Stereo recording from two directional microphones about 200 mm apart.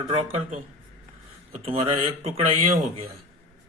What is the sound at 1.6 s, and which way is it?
Speech, 30° right (ahead or behind).